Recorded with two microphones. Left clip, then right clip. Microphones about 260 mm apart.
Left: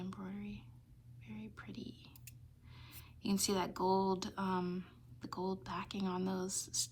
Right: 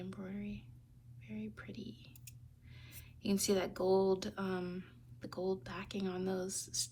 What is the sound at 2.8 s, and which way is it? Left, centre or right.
Speech, centre.